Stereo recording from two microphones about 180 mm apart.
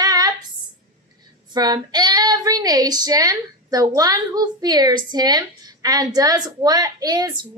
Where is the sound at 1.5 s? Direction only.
20° right (ahead or behind).